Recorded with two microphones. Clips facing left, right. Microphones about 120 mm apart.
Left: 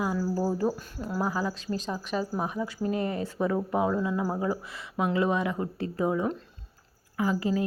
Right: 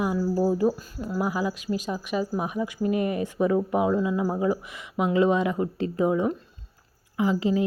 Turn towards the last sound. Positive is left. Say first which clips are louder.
# right 3 dB
turn(degrees=-20)  # may be behind; listen again after turning